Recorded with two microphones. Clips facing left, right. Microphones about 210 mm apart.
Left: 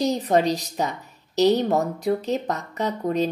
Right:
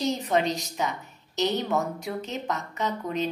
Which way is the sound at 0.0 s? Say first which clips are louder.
Left 5 dB; 35° left (ahead or behind).